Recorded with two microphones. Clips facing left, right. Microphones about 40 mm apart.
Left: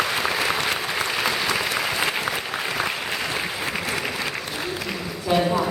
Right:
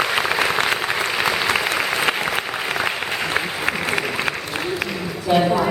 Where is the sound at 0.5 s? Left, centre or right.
Right.